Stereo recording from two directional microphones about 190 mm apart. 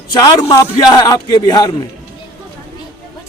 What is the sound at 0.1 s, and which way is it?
A man's voice, 20° left (ahead or behind).